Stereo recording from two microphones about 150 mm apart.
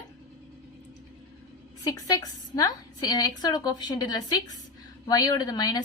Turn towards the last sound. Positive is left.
turn(degrees=25)  # may be behind; listen again after turning